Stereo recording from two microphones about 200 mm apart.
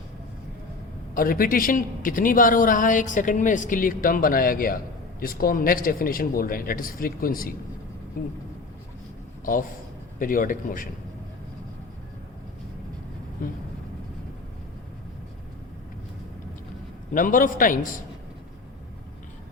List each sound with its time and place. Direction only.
1.1 s speech: 45° left (ahead or behind)
10.2 s speech: 45° left (ahead or behind)
13.4 s speech: 45° left (ahead or behind)
17.1 s speech: 40° left (ahead or behind)